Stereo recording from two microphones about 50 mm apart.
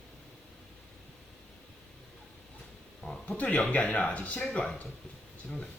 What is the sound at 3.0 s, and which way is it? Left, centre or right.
Speech, left.